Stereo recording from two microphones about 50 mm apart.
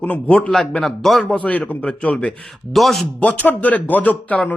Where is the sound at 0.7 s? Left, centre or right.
Centre.